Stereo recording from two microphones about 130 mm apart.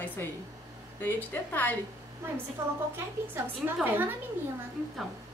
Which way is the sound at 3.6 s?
15° right (ahead or behind).